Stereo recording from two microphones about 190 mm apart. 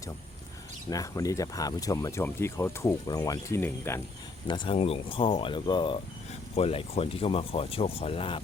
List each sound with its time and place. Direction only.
0.9 s speech: 20° left (ahead or behind)
4.4 s speech: 25° left (ahead or behind)